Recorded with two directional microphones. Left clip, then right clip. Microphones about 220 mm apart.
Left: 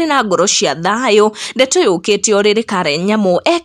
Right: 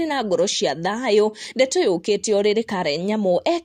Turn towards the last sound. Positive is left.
turn(degrees=20)  # may be behind; listen again after turning